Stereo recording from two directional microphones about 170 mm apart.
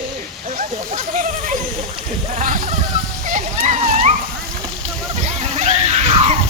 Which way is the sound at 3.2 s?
45° right (ahead or behind).